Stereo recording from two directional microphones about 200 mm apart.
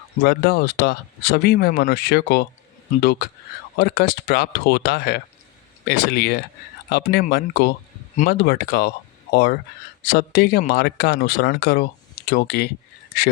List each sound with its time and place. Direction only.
0.2 s speech: 50° left (ahead or behind)